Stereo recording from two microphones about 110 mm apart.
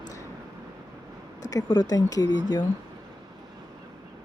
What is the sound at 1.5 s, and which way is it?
Speech, 40° left (ahead or behind).